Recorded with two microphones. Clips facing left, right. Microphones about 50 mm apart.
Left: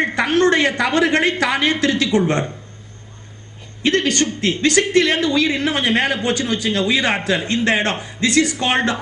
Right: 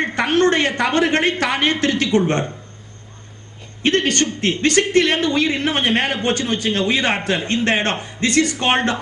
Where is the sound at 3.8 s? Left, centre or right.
Right.